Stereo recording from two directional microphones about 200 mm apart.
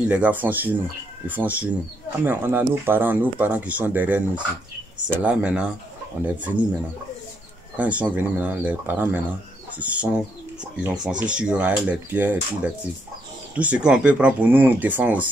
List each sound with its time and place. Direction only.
0.1 s speech: 10° right (ahead or behind)
4.9 s speech: 20° right (ahead or behind)
5.2 s speech: 5° right (ahead or behind)
7.7 s speech: 5° right (ahead or behind)